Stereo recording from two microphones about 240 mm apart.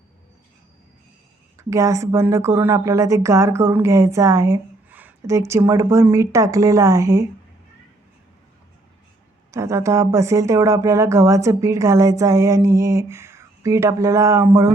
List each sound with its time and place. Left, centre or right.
1.5 s speech: centre
9.5 s speech: centre